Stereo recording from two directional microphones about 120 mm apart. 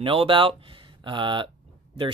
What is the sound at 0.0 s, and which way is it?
Speech, 50° right (ahead or behind).